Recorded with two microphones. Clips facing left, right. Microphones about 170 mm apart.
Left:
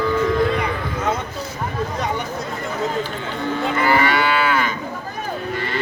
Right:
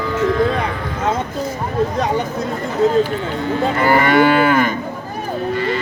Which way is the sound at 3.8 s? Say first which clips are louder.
Right 6 dB; 50° right (ahead or behind).